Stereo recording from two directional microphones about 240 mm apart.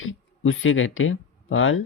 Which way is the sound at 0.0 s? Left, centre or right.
Left.